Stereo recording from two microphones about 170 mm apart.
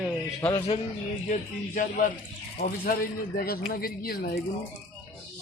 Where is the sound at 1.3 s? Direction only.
55° left (ahead or behind).